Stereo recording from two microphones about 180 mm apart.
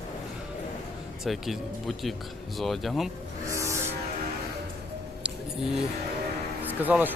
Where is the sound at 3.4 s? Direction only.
15° right (ahead or behind).